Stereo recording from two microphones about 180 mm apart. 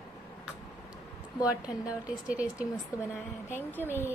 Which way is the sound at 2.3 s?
5° right (ahead or behind).